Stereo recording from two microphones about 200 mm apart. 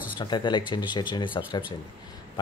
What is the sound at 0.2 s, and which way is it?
A man's voice, 20° left (ahead or behind).